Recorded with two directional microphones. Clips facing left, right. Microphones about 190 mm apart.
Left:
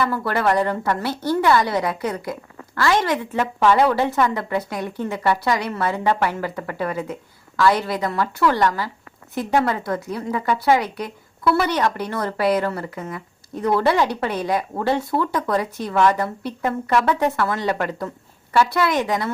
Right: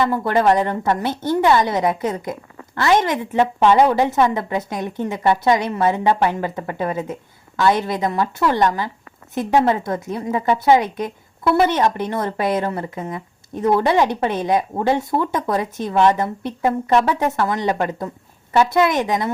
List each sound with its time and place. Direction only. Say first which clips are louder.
0.0 s a woman's voice: right 4 dB; 20° right (ahead or behind)